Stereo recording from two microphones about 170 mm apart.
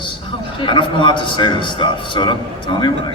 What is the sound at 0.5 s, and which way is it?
A man's voice, 30° left (ahead or behind).